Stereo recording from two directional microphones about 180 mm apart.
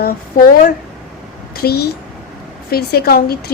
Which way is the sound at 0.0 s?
50° left (ahead or behind).